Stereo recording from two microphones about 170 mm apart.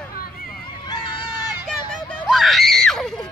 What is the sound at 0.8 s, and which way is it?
Run, 25° left (ahead or behind).